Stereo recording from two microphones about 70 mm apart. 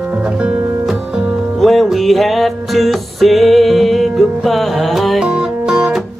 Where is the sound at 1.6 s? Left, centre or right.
Centre.